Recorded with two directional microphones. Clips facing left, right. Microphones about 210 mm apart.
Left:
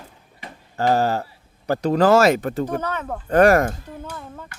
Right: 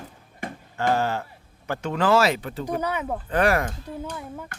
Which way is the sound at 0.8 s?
40° left (ahead or behind).